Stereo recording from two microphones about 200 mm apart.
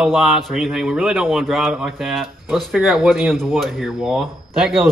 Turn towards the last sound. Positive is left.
turn(degrees=0)  # may be behind; listen again after turning